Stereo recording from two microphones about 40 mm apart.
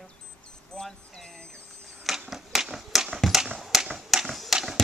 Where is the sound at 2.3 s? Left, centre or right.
Centre.